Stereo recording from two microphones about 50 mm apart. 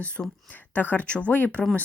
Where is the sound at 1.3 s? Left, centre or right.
Left.